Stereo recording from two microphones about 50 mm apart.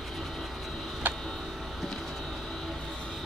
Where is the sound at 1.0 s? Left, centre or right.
Right.